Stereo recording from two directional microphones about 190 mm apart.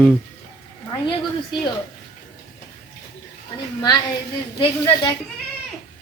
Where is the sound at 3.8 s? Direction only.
25° left (ahead or behind).